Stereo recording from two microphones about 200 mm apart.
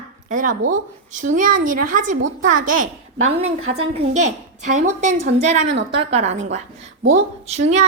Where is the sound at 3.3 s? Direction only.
30° right (ahead or behind).